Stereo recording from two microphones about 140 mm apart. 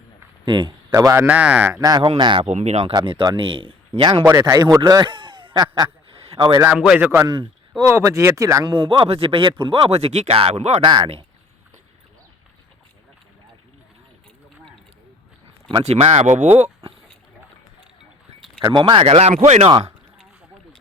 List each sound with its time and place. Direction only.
0.4 s speech: 35° right (ahead or behind)
0.9 s speech: 20° right (ahead or behind)
1.2 s speech: 10° right (ahead or behind)
1.8 s speech: 30° right (ahead or behind)
2.5 s speech: 50° right (ahead or behind)
2.9 s speech: 35° right (ahead or behind)
4.3 s speech: 20° right (ahead or behind)
5.7 s a sound: 35° right (ahead or behind)
6.6 s speech: 10° right (ahead or behind)
7.8 s speech: 20° right (ahead or behind)
8.7 s speech: 35° right (ahead or behind); by 10.8 s 50° right (ahead or behind)
10.8 s speech: 40° right (ahead or behind)
15.8 s speech: 50° right (ahead or behind)
18.6 s speech: 30° right (ahead or behind); by 19.7 s 50° right (ahead or behind)